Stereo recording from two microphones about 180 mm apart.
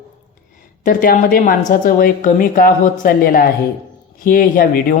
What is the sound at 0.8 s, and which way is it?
A woman's voice, 50° left (ahead or behind).